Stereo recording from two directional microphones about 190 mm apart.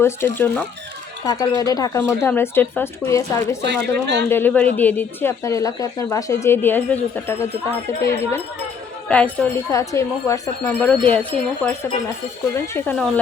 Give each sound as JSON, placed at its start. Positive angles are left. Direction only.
{"t": 0.0, "sound": "speech", "side_deg": 10}
{"t": 3.7, "sound": "speech", "side_deg": -65}
{"t": 4.3, "sound": "speech", "side_deg": 10}